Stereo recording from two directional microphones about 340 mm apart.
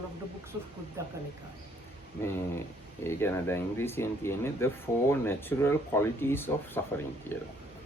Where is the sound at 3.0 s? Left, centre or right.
Centre.